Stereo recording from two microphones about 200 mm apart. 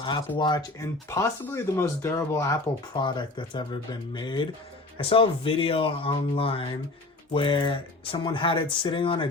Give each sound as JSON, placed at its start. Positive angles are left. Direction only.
{"t": 0.3, "sound": "speech", "side_deg": 20}